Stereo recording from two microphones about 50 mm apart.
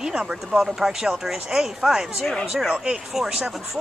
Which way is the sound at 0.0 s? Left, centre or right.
Centre.